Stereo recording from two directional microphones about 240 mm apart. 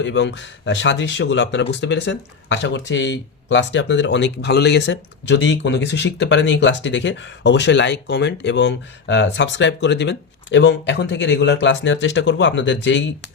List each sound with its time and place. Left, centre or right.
0.0 s speech: left